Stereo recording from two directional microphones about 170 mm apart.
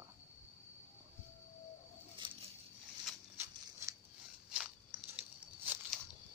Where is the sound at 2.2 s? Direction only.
30° right (ahead or behind).